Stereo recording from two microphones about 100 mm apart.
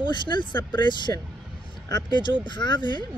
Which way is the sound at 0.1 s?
50° left (ahead or behind).